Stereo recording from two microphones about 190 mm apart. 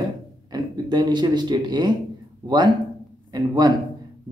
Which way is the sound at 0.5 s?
20° right (ahead or behind).